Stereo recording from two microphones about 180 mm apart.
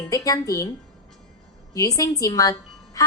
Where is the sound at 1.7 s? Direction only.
20° left (ahead or behind).